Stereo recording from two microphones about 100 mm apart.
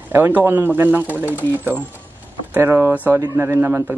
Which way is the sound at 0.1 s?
20° right (ahead or behind).